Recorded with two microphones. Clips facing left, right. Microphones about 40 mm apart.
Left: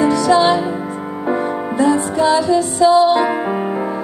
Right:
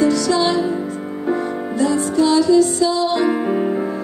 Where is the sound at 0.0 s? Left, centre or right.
Left.